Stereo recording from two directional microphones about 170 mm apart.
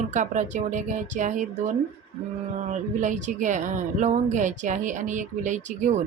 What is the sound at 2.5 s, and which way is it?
Speech, 45° right (ahead or behind).